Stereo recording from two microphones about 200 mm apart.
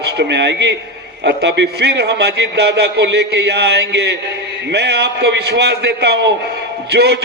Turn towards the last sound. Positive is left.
turn(degrees=-55)  # may be behind; listen again after turning